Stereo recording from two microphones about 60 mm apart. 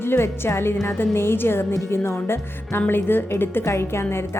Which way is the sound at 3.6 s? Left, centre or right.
Left.